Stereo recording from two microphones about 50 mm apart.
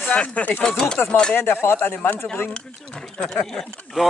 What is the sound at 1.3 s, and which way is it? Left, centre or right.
Speech, left.